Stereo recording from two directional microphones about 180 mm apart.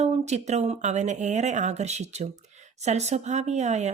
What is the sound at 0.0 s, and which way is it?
Speech, 40° right (ahead or behind).